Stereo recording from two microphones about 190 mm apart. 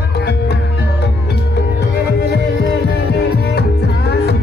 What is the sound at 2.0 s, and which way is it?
Music, 60° left (ahead or behind).